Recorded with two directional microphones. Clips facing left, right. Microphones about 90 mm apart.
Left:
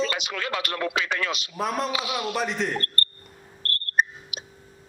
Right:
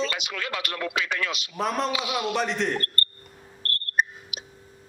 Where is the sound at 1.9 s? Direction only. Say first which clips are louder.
Even; 35° left (ahead or behind).